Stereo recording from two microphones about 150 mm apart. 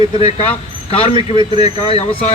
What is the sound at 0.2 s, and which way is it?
A man's voice, 40° left (ahead or behind).